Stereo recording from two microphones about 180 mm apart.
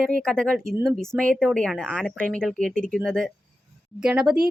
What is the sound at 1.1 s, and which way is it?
Speech, 5° left (ahead or behind).